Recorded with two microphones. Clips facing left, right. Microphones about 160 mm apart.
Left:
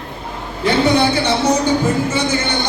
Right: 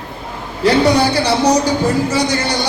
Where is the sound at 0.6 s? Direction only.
35° right (ahead or behind).